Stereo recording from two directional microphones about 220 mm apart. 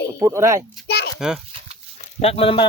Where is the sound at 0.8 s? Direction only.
45° left (ahead or behind).